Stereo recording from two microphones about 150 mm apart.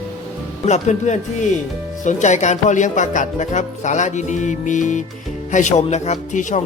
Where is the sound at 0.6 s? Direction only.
50° left (ahead or behind).